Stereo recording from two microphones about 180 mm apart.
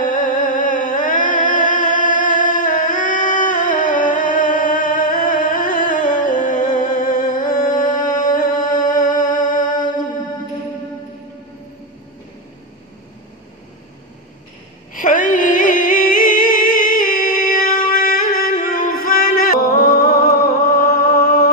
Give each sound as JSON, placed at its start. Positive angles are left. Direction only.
{"t": 0.0, "sound": "music", "side_deg": 50}
{"t": 15.0, "sound": "music", "side_deg": 50}